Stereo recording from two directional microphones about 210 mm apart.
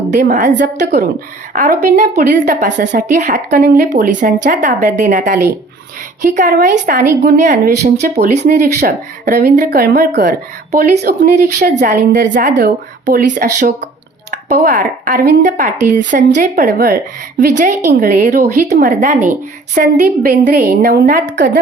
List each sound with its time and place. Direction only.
0.1 s a woman's voice: 40° right (ahead or behind)
11.7 s a woman's voice: 35° right (ahead or behind)
18.0 s speech: 40° right (ahead or behind)
18.7 s a woman's voice: 35° right (ahead or behind)